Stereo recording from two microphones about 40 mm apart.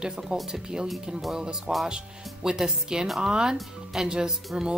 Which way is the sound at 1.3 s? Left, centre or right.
Centre.